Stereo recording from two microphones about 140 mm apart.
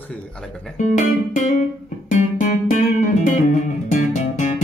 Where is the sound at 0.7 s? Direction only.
55° left (ahead or behind).